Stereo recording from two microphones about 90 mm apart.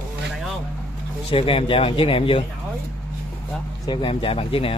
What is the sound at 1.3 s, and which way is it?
Speech, 90° left.